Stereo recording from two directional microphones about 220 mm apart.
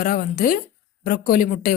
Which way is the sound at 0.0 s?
40° left (ahead or behind).